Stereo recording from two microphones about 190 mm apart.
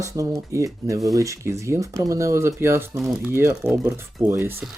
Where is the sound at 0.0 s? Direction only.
15° right (ahead or behind).